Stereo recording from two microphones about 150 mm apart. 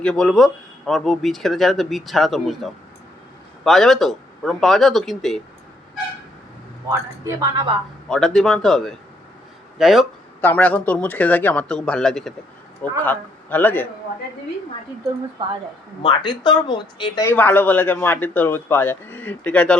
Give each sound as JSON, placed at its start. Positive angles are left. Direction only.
{"t": 0.0, "sound": "speech", "side_deg": 5}
{"t": 7.3, "sound": "a woman's voice", "side_deg": -25}
{"t": 8.1, "sound": "speech", "side_deg": 5}
{"t": 10.4, "sound": "a man's voice", "side_deg": 10}
{"t": 16.0, "sound": "speech", "side_deg": 30}
{"t": 17.2, "sound": "a man's voice", "side_deg": 15}